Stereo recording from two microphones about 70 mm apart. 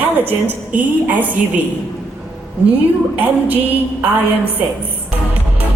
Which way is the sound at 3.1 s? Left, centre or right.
Right.